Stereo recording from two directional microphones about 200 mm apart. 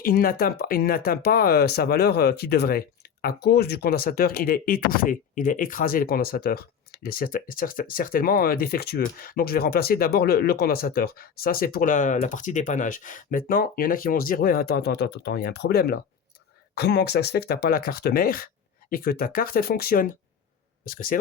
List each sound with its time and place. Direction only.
0.0 s speech: 45° left (ahead or behind)